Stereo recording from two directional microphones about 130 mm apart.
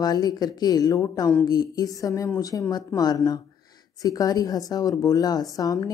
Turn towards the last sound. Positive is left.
turn(degrees=25)  # may be behind; listen again after turning